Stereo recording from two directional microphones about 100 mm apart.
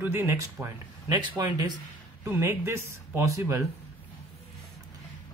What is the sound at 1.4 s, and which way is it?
Speech, 40° right (ahead or behind).